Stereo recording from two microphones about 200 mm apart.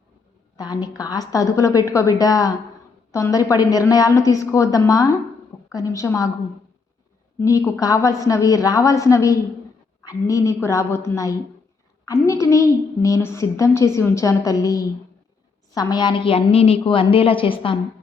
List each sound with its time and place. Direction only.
0.5 s a woman's voice: 20° left (ahead or behind)
7.3 s a woman's voice: 15° left (ahead or behind)